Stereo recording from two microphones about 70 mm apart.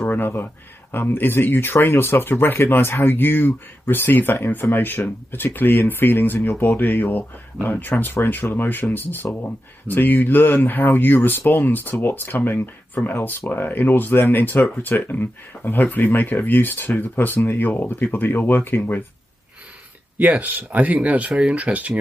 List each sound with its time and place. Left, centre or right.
0.0 s speech: left
20.2 s speech: right
21.3 s speech: centre
21.5 s speech: right